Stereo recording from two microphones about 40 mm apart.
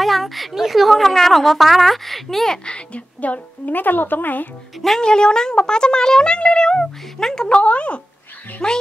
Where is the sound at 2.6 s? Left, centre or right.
Left.